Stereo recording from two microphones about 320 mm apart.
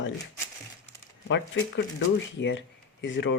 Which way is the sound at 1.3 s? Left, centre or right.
Left.